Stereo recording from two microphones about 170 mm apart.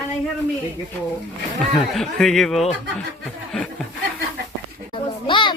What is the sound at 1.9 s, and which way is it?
Speech, 5° left (ahead or behind).